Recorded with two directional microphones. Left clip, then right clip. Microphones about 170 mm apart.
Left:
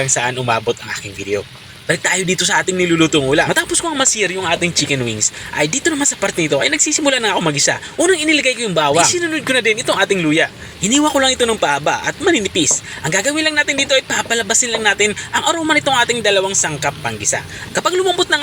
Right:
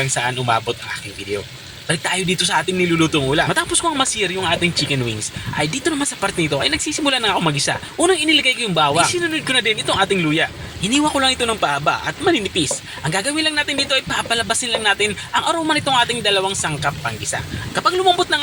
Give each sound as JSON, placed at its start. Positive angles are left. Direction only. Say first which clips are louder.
{"t": 0.0, "sound": "speech", "louder": "left 3 dB", "side_deg": 15}
{"t": 1.9, "sound": "speech", "louder": "left 4 dB", "side_deg": 20}
{"t": 5.5, "sound": "speech", "louder": "left 3 dB", "side_deg": 20}